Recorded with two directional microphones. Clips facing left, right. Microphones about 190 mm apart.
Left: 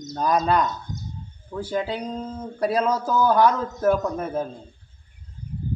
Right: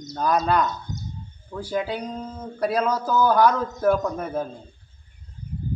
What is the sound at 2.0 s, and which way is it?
A man's voice, 10° left (ahead or behind).